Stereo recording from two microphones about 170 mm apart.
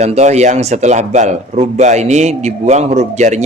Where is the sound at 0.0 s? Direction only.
40° right (ahead or behind).